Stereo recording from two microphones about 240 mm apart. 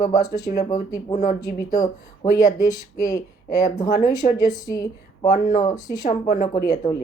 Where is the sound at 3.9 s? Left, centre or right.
Left.